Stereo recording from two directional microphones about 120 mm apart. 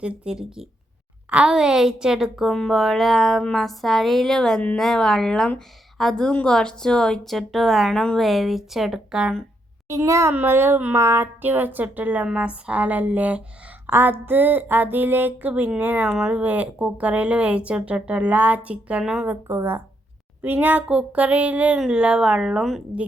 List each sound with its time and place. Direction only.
0.0 s a woman's voice: 5° right (ahead or behind)
9.9 s speech: 25° right (ahead or behind)
16.0 s speech: 5° right (ahead or behind)
19.3 s speech: 20° right (ahead or behind); by 23.0 s 5° right (ahead or behind)